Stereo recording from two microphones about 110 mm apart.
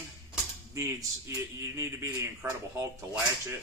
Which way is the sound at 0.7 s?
25° right (ahead or behind).